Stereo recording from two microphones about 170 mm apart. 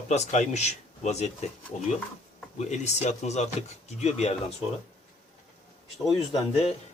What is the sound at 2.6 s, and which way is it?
Speech, 40° left (ahead or behind).